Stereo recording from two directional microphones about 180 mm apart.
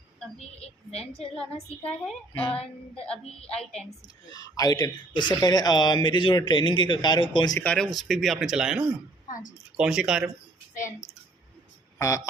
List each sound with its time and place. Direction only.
0.9 s a woman's voice: 35° left (ahead or behind)
1.8 s speech: 5° left (ahead or behind)
2.4 s a woman's voice: 30° left (ahead or behind)
4.0 s speech: 20° left (ahead or behind)
7.6 s speech: 5° left (ahead or behind)
11.9 s speech: 15° left (ahead or behind)